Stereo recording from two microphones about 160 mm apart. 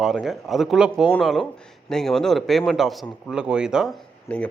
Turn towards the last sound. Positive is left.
turn(degrees=5)  # may be behind; listen again after turning